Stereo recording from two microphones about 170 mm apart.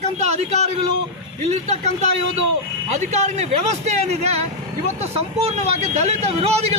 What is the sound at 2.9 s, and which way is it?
Speech, 40° right (ahead or behind).